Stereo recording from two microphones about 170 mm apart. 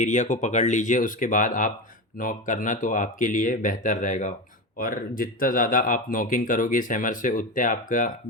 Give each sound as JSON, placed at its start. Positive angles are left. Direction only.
{"t": 0.0, "sound": "speech", "side_deg": 45}